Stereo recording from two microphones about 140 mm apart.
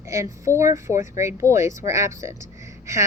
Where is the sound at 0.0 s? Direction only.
20° right (ahead or behind).